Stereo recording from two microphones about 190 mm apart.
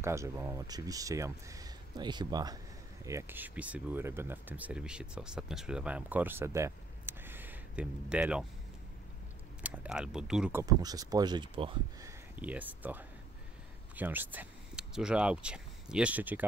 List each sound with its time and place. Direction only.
0.0 s speech: 15° right (ahead or behind)
9.6 s speech: 5° right (ahead or behind)
10.6 s speech: 20° right (ahead or behind)
12.1 s speech: 10° right (ahead or behind)